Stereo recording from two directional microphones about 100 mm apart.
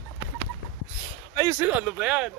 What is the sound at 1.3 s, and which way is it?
Speech, 30° right (ahead or behind).